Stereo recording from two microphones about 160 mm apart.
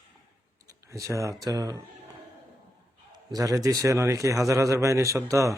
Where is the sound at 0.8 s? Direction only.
20° right (ahead or behind).